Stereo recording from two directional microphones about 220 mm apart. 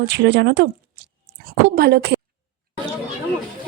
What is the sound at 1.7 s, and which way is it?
Speech, 45° right (ahead or behind).